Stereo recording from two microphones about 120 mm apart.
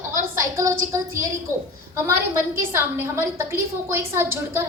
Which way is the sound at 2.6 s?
20° right (ahead or behind).